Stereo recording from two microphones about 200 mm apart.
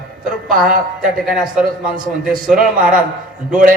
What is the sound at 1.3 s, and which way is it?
Speech, 5° right (ahead or behind).